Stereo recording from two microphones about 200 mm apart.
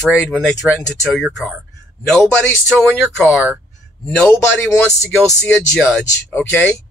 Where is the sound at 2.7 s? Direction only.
Centre (ahead or behind).